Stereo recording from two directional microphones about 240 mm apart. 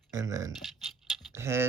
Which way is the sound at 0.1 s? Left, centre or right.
Centre.